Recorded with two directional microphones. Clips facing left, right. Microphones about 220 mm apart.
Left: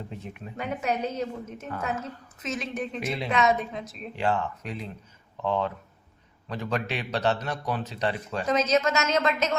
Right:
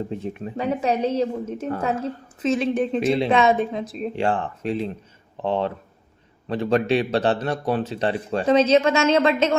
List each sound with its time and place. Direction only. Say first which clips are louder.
0.3 s a woman's voice: right 7 dB; 30° right (ahead or behind)